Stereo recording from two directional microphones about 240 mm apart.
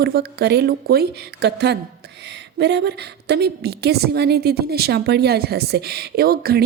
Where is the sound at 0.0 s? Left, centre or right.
Right.